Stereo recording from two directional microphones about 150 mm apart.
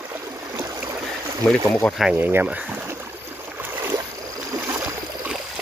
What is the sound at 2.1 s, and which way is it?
Speech, 15° right (ahead or behind).